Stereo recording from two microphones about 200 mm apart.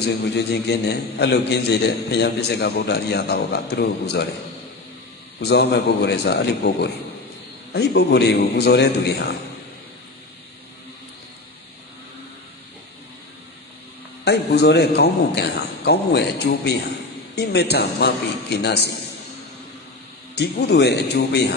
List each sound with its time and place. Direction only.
0.0 s a man's voice: 55° left (ahead or behind)
5.4 s a man's voice: 55° left (ahead or behind)
14.2 s a man's voice: 55° left (ahead or behind)
20.3 s a man's voice: 55° left (ahead or behind)